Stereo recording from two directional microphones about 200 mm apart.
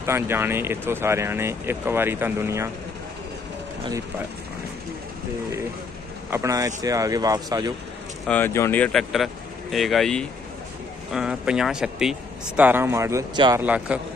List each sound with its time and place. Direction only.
0.0 s speech: 10° right (ahead or behind)
6.3 s speech: 15° right (ahead or behind)
8.3 s speech: 10° left (ahead or behind); by 13.6 s 15° right (ahead or behind)
13.6 s speech: 5° right (ahead or behind)